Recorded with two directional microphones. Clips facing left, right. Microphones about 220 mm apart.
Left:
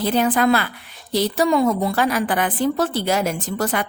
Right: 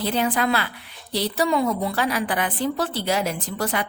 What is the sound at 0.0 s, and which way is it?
A woman's voice, 45° left (ahead or behind).